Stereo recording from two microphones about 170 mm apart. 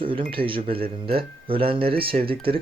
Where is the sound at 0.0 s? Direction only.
30° right (ahead or behind).